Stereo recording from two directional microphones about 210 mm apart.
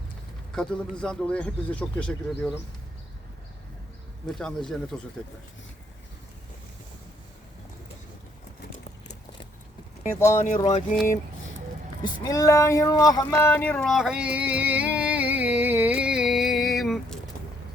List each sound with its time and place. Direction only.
0.5 s speech: 5° left (ahead or behind)
4.3 s speech: centre (ahead or behind)
10.2 s speech: 10° left (ahead or behind)
10.4 s a sound: 35° left (ahead or behind)
12.0 s speech: 20° left (ahead or behind)
13.4 s a sound: 10° left (ahead or behind)